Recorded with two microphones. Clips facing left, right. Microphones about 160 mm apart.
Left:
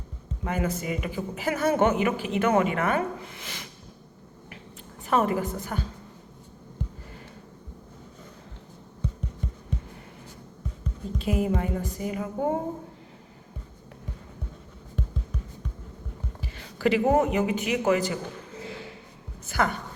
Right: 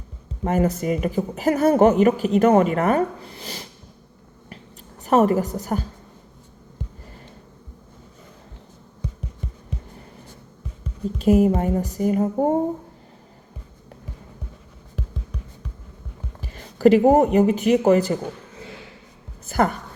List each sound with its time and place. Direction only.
0.4 s speech: 40° right (ahead or behind)
5.0 s speech: 40° right (ahead or behind)
11.2 s speech: 45° right (ahead or behind)
16.6 s speech: 40° right (ahead or behind)
19.5 s a woman's voice: 40° right (ahead or behind)